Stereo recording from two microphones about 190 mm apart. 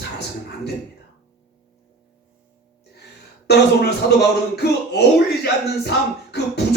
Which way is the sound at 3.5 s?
60° left (ahead or behind).